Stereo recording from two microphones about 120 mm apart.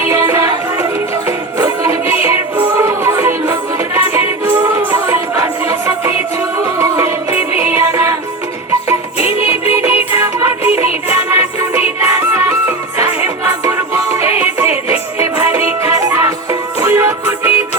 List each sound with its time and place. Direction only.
0.1 s music: 25° right (ahead or behind)
9.5 s music: 20° right (ahead or behind)